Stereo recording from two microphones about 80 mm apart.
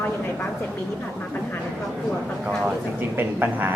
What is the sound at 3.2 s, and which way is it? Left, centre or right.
Speech, right.